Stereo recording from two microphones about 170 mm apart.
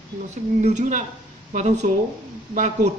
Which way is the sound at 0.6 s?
45° right (ahead or behind).